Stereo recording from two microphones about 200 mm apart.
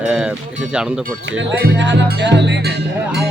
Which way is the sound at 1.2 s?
65° right (ahead or behind).